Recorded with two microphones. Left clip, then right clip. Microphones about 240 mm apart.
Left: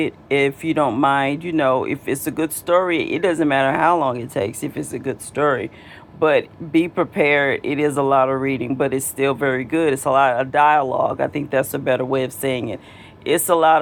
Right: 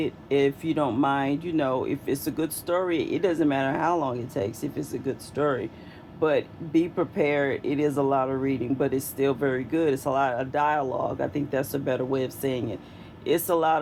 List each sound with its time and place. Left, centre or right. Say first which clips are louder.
0.0 s speech: left 5 dB; left